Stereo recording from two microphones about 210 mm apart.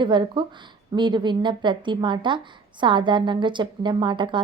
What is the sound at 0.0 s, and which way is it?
A woman's voice, 20° right (ahead or behind).